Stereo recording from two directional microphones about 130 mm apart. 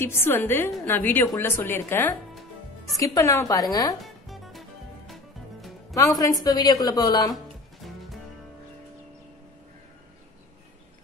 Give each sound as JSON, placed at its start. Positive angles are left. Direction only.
{"t": 0.0, "sound": "a woman's voice", "side_deg": 15}
{"t": 4.0, "sound": "music", "side_deg": 0}
{"t": 6.1, "sound": "a woman's voice", "side_deg": 30}